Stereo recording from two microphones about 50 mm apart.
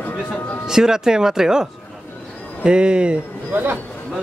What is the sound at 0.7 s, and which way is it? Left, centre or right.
Speech, centre.